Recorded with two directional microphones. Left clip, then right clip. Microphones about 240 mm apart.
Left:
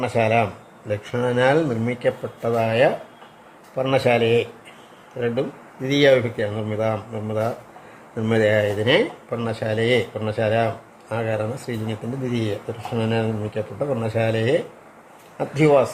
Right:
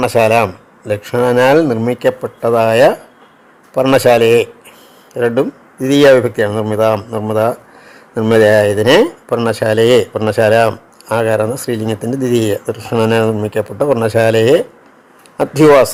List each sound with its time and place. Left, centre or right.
0.0 s speech: right